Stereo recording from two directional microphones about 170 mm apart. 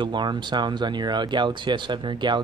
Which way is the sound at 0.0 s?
25° right (ahead or behind).